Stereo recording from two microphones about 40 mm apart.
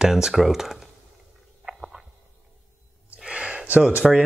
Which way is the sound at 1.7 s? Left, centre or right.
Right.